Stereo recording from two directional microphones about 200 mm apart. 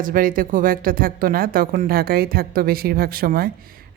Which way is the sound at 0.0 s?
45° right (ahead or behind).